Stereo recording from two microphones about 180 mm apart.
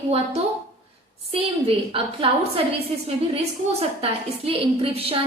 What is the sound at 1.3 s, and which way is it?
A woman's voice, 30° right (ahead or behind).